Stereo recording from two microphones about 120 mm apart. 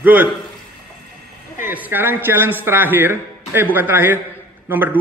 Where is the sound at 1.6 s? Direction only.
15° right (ahead or behind).